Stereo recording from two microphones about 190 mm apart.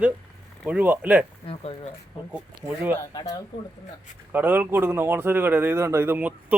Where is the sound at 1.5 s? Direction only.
30° left (ahead or behind).